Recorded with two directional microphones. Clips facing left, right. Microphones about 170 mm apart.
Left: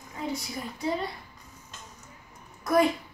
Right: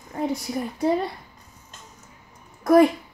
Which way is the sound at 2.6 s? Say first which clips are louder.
Right 8 dB; 55° right (ahead or behind).